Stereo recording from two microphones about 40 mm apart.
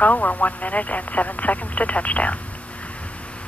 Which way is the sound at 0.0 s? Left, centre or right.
Left.